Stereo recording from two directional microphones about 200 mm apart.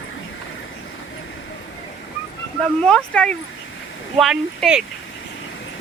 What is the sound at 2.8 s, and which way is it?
Speech, 5° left (ahead or behind).